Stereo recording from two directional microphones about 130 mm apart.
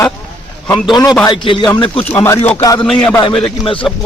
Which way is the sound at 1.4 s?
40° left (ahead or behind).